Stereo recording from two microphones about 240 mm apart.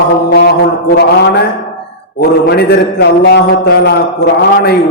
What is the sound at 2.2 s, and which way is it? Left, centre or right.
A man's voice, left.